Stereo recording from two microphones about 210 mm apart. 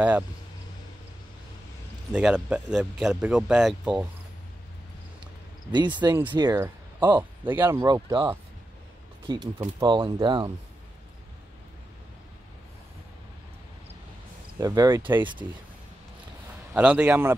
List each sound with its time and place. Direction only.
2.1 s speech: 5° right (ahead or behind)
5.9 s speech: 20° right (ahead or behind)
9.3 s speech: 20° right (ahead or behind)
14.6 s speech: 15° right (ahead or behind)
16.7 s speech: 5° right (ahead or behind)